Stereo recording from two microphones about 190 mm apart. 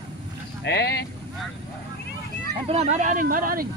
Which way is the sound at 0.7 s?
60° left (ahead or behind).